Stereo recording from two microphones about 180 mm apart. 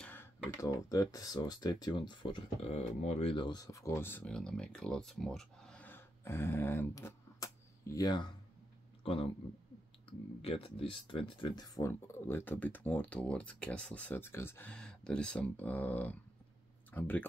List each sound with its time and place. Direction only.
0.0 s speech: 10° left (ahead or behind)